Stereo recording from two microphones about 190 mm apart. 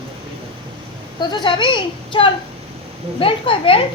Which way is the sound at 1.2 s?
25° left (ahead or behind).